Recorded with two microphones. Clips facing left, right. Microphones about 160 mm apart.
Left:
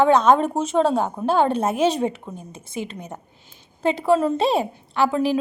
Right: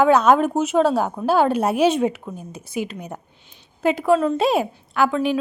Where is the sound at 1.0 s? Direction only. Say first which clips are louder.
Right 1 dB; 20° left (ahead or behind).